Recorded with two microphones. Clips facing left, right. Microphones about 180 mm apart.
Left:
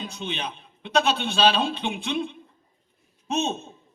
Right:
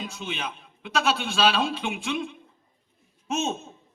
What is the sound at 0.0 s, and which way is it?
A man's voice, 30° left (ahead or behind).